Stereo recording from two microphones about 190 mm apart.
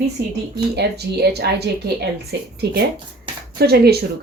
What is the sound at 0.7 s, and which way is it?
Speech, 60° right (ahead or behind).